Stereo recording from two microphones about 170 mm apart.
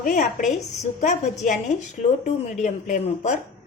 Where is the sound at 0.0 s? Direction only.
50° left (ahead or behind).